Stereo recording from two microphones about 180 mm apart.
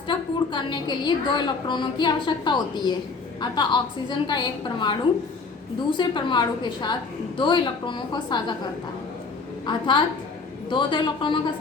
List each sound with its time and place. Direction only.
0.1 s a woman's voice: 25° left (ahead or behind)
9.6 s a woman's voice: 25° left (ahead or behind)